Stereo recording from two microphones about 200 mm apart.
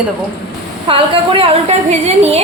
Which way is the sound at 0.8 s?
25° right (ahead or behind).